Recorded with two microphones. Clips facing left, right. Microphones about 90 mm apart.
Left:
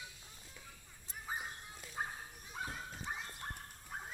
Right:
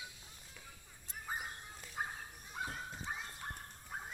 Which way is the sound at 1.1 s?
5° left (ahead or behind).